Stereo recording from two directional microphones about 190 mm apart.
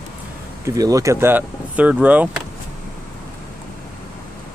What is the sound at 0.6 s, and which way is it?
Speech, 15° right (ahead or behind).